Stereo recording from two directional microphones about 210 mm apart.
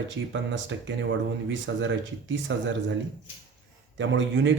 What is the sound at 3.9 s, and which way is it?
Speech, 60° right (ahead or behind).